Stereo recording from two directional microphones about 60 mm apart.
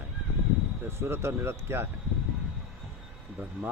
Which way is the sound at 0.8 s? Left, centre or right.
Right.